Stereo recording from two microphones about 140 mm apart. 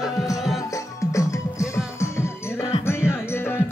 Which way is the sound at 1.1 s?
20° left (ahead or behind).